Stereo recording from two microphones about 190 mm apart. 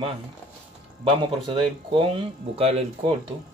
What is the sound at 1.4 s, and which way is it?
Speech, 25° right (ahead or behind).